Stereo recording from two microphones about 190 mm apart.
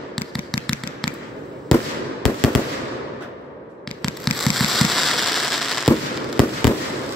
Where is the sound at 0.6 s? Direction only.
5° left (ahead or behind).